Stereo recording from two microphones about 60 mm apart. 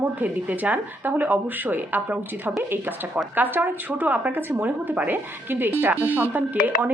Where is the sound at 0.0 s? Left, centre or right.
Right.